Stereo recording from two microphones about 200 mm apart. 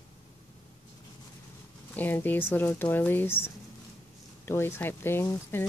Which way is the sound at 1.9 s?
10° left (ahead or behind).